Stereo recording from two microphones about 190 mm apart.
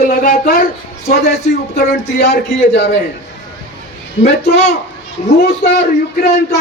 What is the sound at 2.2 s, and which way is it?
Speech, 65° left (ahead or behind).